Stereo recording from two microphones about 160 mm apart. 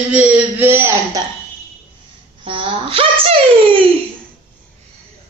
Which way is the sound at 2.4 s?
35° right (ahead or behind).